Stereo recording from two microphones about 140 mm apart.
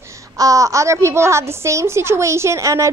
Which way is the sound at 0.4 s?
25° right (ahead or behind).